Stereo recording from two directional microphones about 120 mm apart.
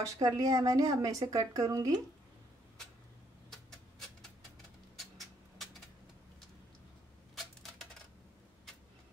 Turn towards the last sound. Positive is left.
turn(degrees=5)  # may be behind; listen again after turning